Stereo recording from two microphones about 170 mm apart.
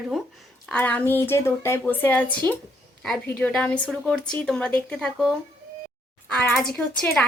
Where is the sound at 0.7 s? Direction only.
10° left (ahead or behind).